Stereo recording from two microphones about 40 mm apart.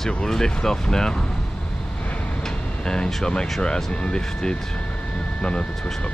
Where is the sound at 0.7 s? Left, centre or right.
Centre.